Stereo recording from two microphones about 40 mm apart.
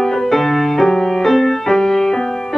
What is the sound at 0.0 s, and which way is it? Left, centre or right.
Music, centre.